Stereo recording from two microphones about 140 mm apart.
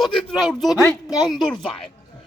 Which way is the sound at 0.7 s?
25° left (ahead or behind).